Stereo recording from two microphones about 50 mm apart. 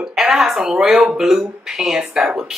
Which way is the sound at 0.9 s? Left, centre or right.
Right.